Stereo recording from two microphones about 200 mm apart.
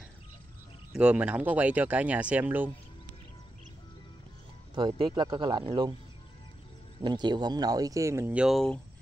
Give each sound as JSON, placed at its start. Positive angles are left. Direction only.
{"t": 0.9, "sound": "speech", "side_deg": -5}
{"t": 4.7, "sound": "speech", "side_deg": -25}
{"t": 7.0, "sound": "speech", "side_deg": -20}